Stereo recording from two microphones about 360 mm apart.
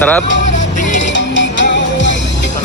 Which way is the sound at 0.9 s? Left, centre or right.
Left.